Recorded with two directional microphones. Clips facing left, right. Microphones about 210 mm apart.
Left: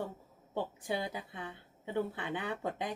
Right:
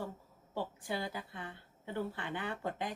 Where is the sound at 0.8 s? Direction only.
20° left (ahead or behind).